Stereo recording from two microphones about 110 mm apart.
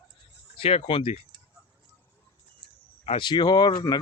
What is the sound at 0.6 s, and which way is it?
Speech, 60° left (ahead or behind).